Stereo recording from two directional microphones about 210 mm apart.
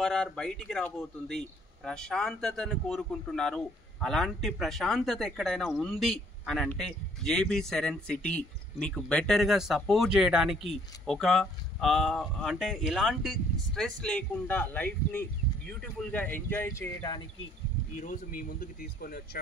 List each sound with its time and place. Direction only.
0.0 s speech: centre (ahead or behind)
17.9 s speech: 40° left (ahead or behind)